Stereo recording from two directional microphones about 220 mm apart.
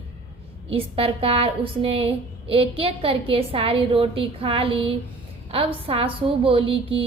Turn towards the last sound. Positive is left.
turn(degrees=-25)  # may be behind; listen again after turning